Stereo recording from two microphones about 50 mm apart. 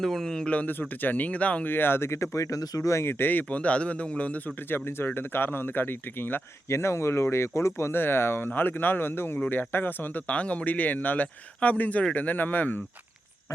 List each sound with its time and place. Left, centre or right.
0.0 s speech: centre
0.7 s speech: left
1.6 s speech: left
3.1 s speech: left
4.7 s speech: left
6.7 s speech: left
7.9 s speech: left
8.4 s speech: left